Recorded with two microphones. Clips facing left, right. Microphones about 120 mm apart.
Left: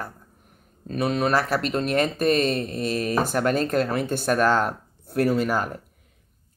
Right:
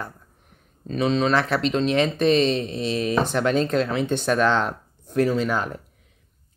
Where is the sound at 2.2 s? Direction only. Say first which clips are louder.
Right 2 dB; 50° left (ahead or behind).